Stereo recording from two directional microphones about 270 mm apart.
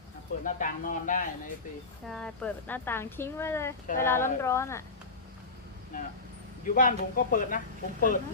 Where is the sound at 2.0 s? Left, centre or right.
Centre.